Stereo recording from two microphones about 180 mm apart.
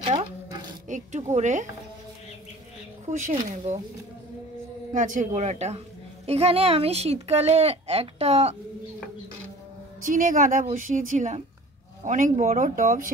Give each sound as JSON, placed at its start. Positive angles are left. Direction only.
{"t": 0.0, "sound": "a sound", "side_deg": -25}
{"t": 0.8, "sound": "speech", "side_deg": -40}
{"t": 3.1, "sound": "speech", "side_deg": -45}
{"t": 4.9, "sound": "a woman's voice", "side_deg": -45}
{"t": 10.0, "sound": "speech", "side_deg": -50}